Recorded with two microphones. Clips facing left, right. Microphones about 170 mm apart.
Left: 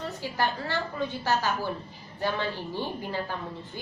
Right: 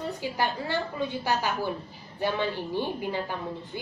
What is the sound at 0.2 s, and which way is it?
A woman's voice, 15° right (ahead or behind).